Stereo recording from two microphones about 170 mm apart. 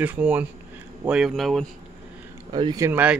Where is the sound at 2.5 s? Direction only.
25° right (ahead or behind).